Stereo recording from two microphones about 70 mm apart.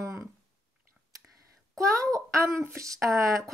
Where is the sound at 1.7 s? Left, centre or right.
Right.